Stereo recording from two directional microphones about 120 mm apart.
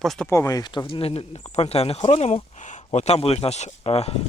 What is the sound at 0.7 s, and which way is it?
Speech, 45° left (ahead or behind).